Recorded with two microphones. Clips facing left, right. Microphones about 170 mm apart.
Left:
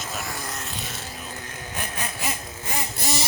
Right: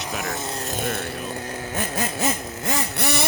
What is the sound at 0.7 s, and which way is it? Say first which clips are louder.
Vehicle: right 9 dB; 55° right (ahead or behind).